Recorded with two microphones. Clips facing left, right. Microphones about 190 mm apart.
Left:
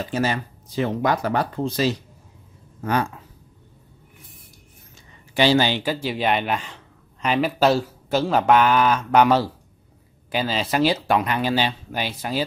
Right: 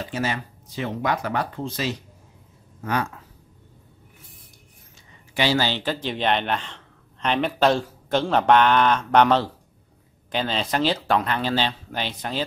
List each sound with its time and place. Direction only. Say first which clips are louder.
0.1 s speech: left 4 dB; 40° left (ahead or behind)
5.3 s speech: left 4 dB; 30° left (ahead or behind)
5.6 s a man's voice: left 3 dB; 10° left (ahead or behind)